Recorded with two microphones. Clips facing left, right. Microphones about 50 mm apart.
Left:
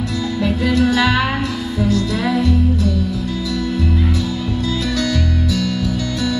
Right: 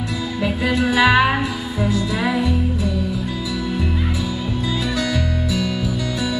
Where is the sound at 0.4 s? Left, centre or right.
Centre.